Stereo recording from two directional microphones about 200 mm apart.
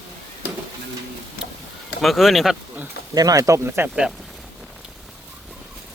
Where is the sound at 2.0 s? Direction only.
Centre (ahead or behind).